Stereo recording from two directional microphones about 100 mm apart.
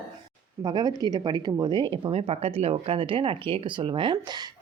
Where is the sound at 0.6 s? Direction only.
40° right (ahead or behind).